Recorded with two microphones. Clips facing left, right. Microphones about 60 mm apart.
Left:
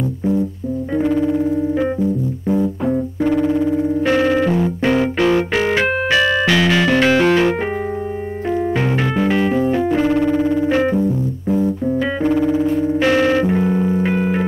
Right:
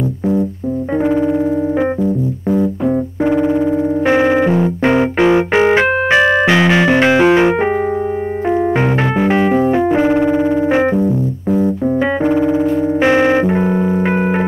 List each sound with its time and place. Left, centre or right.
1.0 s keyboard: right
2.9 s music: centre
9.2 s keyboard: right
12.2 s music: centre; by 14.4 s right